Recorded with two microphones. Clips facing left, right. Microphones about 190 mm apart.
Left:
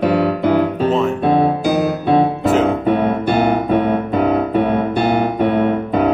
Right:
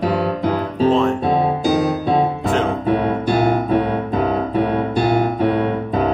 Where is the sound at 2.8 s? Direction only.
60° left (ahead or behind).